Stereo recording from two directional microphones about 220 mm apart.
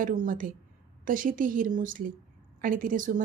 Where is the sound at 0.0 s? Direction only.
35° right (ahead or behind).